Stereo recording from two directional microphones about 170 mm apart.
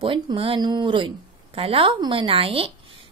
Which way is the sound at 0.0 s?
30° right (ahead or behind).